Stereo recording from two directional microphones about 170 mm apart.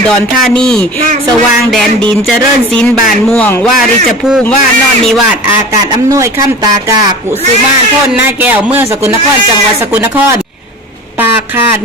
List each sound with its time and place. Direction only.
0.4 s speech: 5° left (ahead or behind)
5.9 s speech: 20° right (ahead or behind)
8.1 s speech: 10° right (ahead or behind)
11.2 s a sound: 15° right (ahead or behind)